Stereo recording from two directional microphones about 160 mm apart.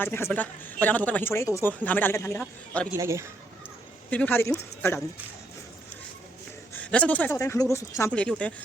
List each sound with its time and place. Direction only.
0.0 s a woman's voice: 15° left (ahead or behind)
2.9 s speech: 20° right (ahead or behind)
4.1 s a woman's voice: 10° left (ahead or behind)
6.7 s a woman's voice: 10° left (ahead or behind)
8.1 s a woman's voice: 5° left (ahead or behind)